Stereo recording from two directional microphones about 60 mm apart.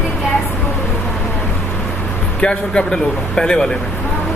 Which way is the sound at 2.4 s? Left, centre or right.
Centre.